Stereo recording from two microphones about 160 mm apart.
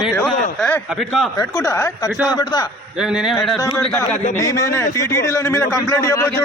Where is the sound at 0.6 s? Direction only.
Centre (ahead or behind).